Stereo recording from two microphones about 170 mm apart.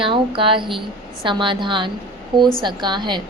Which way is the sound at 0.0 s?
30° right (ahead or behind).